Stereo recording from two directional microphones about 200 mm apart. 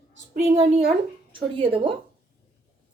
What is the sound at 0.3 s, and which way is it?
A woman's voice, 30° right (ahead or behind).